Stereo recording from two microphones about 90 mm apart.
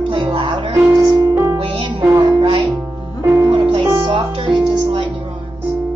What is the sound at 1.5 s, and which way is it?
Music, 70° right (ahead or behind).